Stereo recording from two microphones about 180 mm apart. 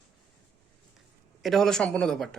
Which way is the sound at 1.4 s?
Centre (ahead or behind).